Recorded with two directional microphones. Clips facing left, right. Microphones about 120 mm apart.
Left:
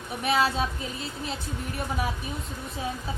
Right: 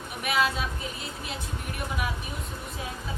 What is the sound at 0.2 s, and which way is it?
Speech, 35° left (ahead or behind).